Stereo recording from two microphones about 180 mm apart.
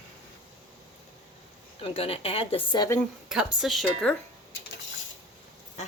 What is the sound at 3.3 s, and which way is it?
Speech, 5° right (ahead or behind).